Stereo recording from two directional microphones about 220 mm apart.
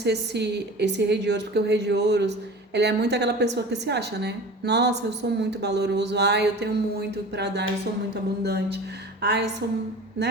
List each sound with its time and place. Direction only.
0.0 s speech: 50° right (ahead or behind)